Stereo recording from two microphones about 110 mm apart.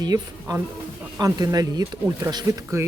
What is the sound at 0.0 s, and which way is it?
Speech, 35° right (ahead or behind).